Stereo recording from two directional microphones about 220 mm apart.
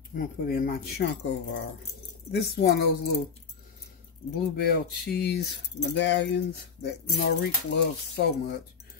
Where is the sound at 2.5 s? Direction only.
45° left (ahead or behind).